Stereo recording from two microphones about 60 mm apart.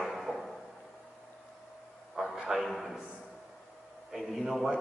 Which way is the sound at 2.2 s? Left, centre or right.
Centre.